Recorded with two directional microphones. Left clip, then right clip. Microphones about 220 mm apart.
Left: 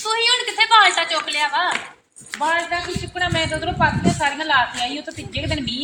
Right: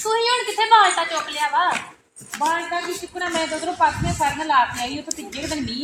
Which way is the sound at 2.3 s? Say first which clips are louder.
Even; 40° right (ahead or behind).